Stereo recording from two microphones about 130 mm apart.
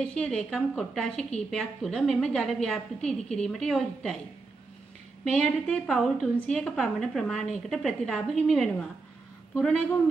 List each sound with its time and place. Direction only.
0.0 s a woman's voice: 5° left (ahead or behind)
5.2 s a woman's voice: 5° left (ahead or behind)